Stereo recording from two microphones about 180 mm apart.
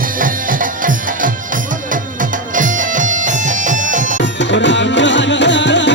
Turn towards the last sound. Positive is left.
turn(degrees=85)